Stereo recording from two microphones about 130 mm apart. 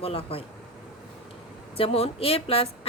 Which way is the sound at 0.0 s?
45° left (ahead or behind).